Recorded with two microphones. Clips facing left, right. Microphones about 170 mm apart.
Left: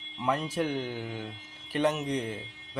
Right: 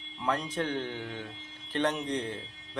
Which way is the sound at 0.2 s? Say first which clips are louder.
Left 2 dB; 10° left (ahead or behind).